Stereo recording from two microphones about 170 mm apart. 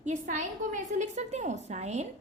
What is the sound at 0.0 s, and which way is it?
A woman's voice, 45° right (ahead or behind).